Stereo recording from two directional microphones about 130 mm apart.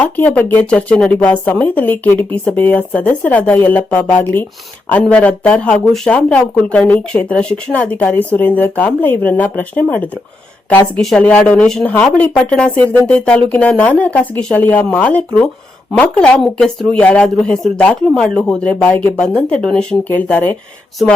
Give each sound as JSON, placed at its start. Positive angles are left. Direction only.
{"t": 0.0, "sound": "speech", "side_deg": 15}